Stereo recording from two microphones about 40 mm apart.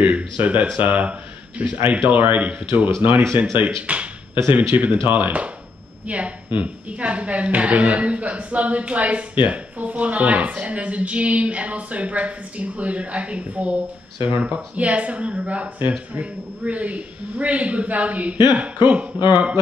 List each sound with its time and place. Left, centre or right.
0.4 s a woman's voice: right
5.0 s a woman's voice: right